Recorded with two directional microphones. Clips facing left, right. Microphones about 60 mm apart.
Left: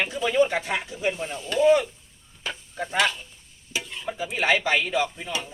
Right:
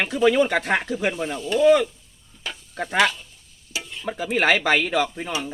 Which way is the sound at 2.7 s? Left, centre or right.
Right.